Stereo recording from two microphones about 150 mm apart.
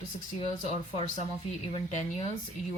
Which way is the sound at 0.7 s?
50° left (ahead or behind).